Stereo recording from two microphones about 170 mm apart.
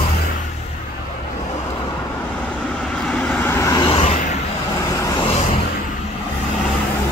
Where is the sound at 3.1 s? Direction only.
5° left (ahead or behind); by 4.0 s 25° left (ahead or behind).